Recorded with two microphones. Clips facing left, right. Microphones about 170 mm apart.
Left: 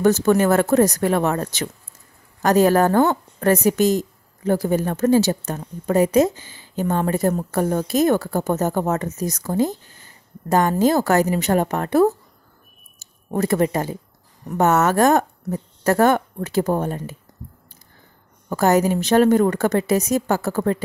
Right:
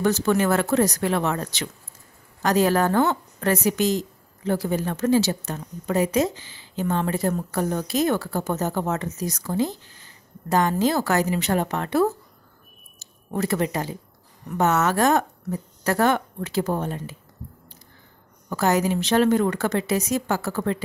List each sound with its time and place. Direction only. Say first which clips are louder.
0.0 s a woman's voice: left 5 dB; 45° left (ahead or behind)
18.5 s a woman's voice: left 4 dB; 45° left (ahead or behind)